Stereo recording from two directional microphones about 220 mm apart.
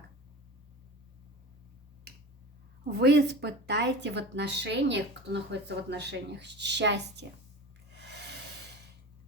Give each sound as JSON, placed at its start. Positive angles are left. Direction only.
{"t": 2.9, "sound": "a woman's voice", "side_deg": -45}
{"t": 7.9, "sound": "snort", "side_deg": -50}